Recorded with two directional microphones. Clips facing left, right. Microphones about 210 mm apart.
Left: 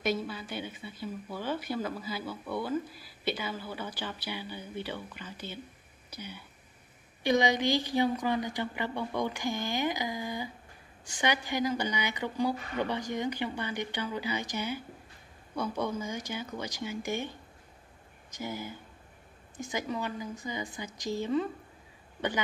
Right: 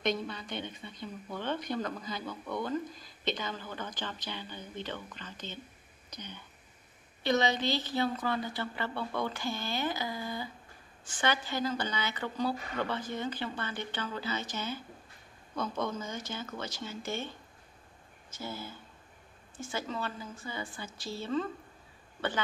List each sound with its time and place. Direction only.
0.0 s speech: 5° left (ahead or behind)